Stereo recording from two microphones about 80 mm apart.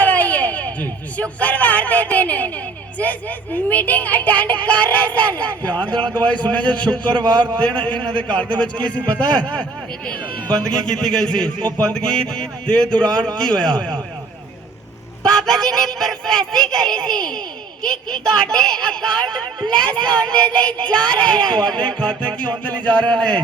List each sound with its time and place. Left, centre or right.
0.0 s a sound: centre
3.0 s a man's voice: centre
15.2 s a man's voice: centre